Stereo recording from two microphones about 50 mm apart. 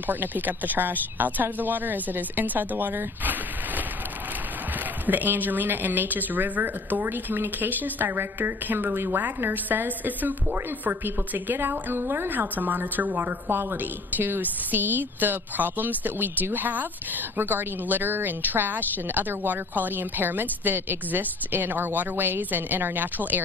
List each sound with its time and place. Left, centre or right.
0.0 s a woman's voice: right
5.0 s a woman's voice: right